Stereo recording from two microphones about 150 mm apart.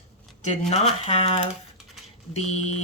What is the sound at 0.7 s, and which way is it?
Speech, 45° left (ahead or behind).